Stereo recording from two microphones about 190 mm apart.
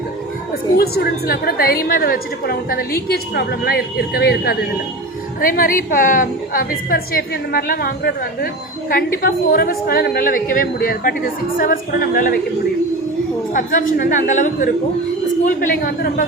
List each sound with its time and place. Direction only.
0.8 s a woman's voice: 55° left (ahead or behind)
13.5 s a woman's voice: 45° left (ahead or behind)